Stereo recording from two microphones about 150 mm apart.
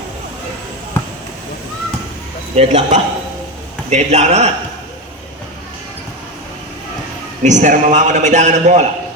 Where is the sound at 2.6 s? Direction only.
50° right (ahead or behind).